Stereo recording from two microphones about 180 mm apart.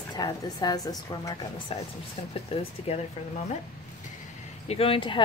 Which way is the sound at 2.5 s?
30° left (ahead or behind).